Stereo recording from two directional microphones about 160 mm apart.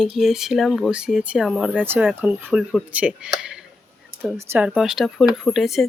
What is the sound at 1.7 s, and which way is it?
Speech, 10° right (ahead or behind).